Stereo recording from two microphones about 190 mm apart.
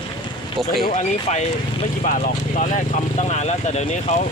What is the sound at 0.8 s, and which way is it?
Speech, 40° left (ahead or behind).